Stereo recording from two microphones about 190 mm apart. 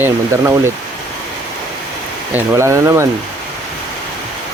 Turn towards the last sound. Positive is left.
turn(degrees=-15)  # may be behind; listen again after turning